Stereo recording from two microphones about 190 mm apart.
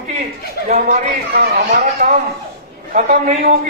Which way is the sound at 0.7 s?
45° right (ahead or behind).